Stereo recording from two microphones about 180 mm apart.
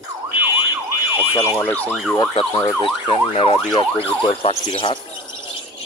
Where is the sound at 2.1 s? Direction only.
25° left (ahead or behind).